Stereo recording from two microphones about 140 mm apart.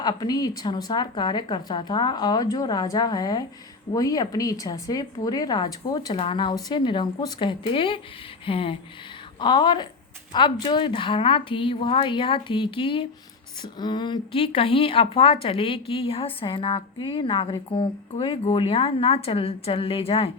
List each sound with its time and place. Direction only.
0.0 s a woman's voice: 30° left (ahead or behind)
6.1 s speech: 40° left (ahead or behind)